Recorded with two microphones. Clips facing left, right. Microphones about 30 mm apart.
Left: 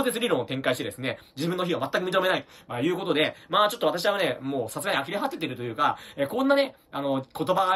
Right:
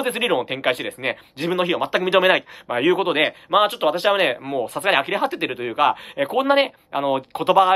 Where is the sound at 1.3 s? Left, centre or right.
Right.